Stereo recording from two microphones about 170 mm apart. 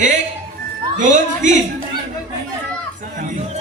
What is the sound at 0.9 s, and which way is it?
Speech, 45° right (ahead or behind).